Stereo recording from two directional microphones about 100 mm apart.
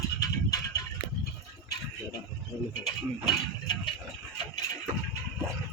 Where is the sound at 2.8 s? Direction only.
45° left (ahead or behind).